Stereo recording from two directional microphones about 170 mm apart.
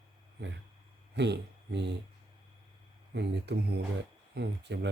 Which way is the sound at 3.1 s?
80° right.